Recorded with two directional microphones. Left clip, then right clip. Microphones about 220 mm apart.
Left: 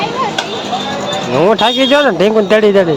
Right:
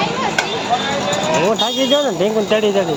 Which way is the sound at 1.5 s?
30° left (ahead or behind).